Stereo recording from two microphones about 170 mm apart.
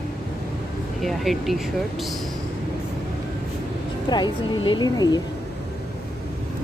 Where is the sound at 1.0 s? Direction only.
Centre (ahead or behind).